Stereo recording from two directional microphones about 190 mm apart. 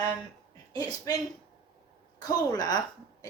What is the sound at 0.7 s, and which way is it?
Speech, 20° left (ahead or behind).